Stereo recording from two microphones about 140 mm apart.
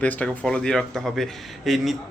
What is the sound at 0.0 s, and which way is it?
A man's voice, 10° left (ahead or behind).